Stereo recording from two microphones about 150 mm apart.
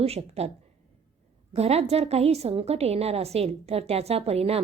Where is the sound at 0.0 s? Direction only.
45° right (ahead or behind).